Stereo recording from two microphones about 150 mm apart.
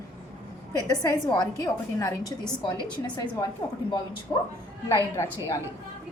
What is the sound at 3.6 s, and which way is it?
A woman's voice, 20° left (ahead or behind).